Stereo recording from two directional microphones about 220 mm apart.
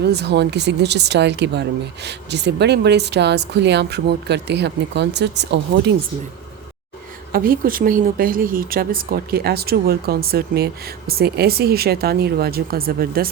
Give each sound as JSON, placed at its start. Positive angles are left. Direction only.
{"t": 0.0, "sound": "speech", "side_deg": -50}
{"t": 7.3, "sound": "speech", "side_deg": -40}